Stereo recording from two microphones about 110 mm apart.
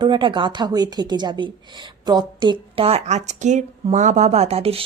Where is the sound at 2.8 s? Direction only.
80° right.